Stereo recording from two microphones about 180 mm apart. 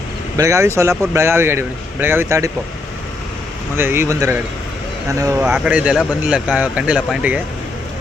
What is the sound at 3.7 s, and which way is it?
Speech, 10° right (ahead or behind).